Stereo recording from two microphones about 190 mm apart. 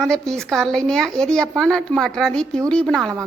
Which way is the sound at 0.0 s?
5° left (ahead or behind).